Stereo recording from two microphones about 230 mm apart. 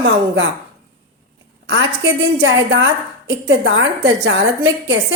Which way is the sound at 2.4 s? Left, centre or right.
Right.